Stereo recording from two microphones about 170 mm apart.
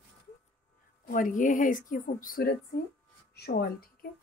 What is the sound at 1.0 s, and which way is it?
Speech, 50° left (ahead or behind).